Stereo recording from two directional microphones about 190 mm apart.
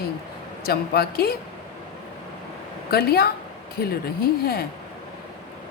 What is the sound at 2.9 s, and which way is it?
Speech, 55° left (ahead or behind).